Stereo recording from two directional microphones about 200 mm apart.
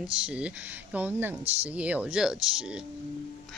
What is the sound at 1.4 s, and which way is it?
Speech, 30° right (ahead or behind).